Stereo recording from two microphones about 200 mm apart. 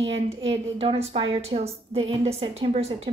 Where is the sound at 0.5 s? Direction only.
30° right (ahead or behind).